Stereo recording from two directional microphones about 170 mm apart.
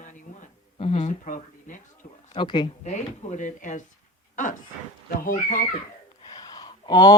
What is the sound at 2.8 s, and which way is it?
Speech, 45° left (ahead or behind).